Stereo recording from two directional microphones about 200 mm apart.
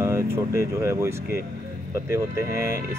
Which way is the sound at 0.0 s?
15° right (ahead or behind).